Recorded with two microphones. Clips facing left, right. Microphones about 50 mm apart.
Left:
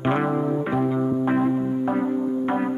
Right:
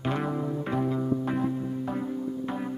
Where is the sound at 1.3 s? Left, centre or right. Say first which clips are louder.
Left 8 dB; left.